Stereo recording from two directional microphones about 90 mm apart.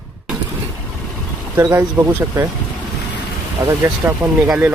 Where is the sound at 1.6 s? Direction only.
30° right (ahead or behind).